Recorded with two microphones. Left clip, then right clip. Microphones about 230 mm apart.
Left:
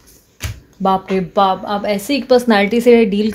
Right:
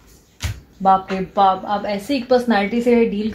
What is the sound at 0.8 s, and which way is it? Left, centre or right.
Speech, left.